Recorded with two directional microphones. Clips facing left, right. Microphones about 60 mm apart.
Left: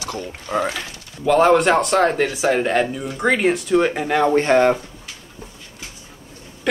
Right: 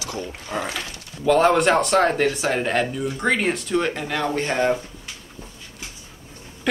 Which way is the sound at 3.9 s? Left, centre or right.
Left.